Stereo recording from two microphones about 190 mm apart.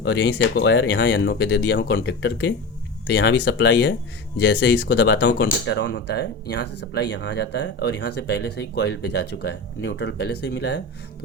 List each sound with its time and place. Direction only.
0.0 s speech: 65° left (ahead or behind)